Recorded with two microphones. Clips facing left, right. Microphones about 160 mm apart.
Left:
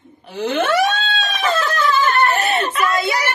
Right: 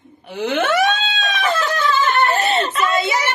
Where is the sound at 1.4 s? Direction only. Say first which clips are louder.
Left 1 dB; 15° right (ahead or behind).